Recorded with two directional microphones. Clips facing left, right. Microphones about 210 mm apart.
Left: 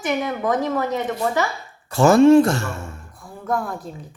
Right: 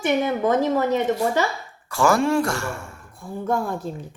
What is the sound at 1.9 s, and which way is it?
Speech, 20° left (ahead or behind).